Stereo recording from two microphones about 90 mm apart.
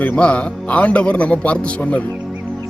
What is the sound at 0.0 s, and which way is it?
Speech, 15° left (ahead or behind).